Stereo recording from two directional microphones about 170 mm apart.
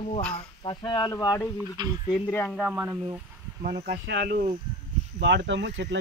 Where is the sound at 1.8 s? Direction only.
25° right (ahead or behind).